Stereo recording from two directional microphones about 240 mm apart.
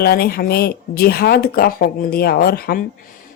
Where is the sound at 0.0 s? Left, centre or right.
Left.